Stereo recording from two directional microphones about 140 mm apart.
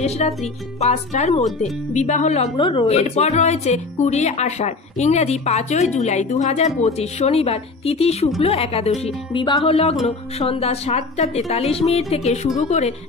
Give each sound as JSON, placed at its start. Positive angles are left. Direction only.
{"t": 0.2, "sound": "speech", "side_deg": 55}